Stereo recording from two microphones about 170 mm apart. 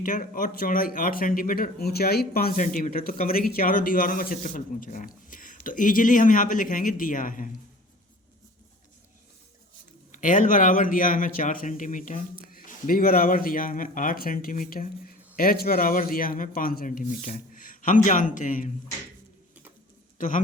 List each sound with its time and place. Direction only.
0.0 s speech: 55° left (ahead or behind)
10.1 s speech: 50° left (ahead or behind)
20.1 s speech: 50° left (ahead or behind)